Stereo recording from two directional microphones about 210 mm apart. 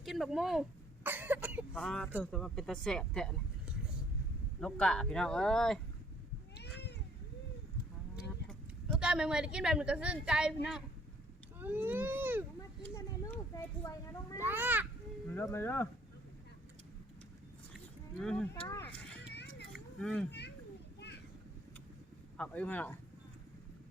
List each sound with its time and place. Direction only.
0.0 s speech: centre (ahead or behind)
1.0 s cough: 10° right (ahead or behind)
1.7 s speech: 5° left (ahead or behind)
6.6 s cat: 55° left (ahead or behind)
8.1 s speech: centre (ahead or behind)
12.8 s a sound: 15° left (ahead or behind)
14.4 s a child's voice: 10° right (ahead or behind)
15.3 s speech: 10° left (ahead or behind)
18.2 s speech: 5° left (ahead or behind)
19.3 s a sound: 55° left (ahead or behind)
19.7 s a sound: centre (ahead or behind)
22.4 s speech: 5° left (ahead or behind)